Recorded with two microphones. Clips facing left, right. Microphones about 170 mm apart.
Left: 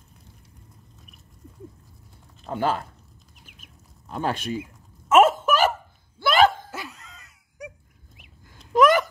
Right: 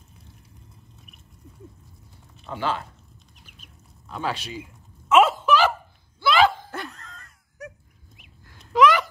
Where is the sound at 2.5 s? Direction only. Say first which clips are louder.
Left 3 dB; 45° left (ahead or behind).